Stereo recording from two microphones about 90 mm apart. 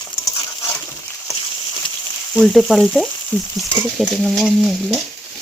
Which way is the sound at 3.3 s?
20° left (ahead or behind).